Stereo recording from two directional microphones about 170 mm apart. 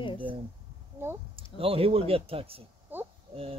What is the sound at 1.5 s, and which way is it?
Speech, 35° right (ahead or behind).